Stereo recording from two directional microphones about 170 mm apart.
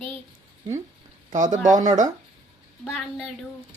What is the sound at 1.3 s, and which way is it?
Speech, 50° right (ahead or behind).